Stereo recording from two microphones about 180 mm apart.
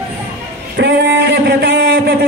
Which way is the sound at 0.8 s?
70° right (ahead or behind).